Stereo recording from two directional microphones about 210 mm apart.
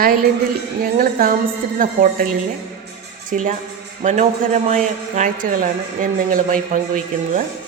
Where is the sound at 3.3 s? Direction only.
35° right (ahead or behind).